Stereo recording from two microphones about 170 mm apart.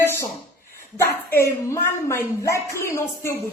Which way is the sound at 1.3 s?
15° left (ahead or behind).